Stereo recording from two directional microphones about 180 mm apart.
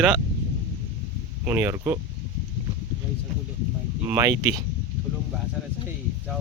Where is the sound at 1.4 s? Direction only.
15° right (ahead or behind).